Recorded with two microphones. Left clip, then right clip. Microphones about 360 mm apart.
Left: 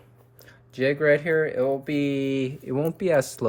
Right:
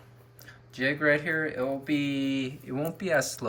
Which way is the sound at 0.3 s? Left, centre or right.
Centre.